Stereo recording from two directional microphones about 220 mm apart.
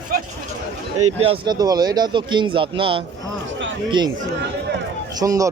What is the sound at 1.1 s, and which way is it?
Speech, 25° right (ahead or behind).